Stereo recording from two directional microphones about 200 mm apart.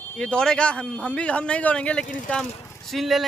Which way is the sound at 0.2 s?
5° left (ahead or behind).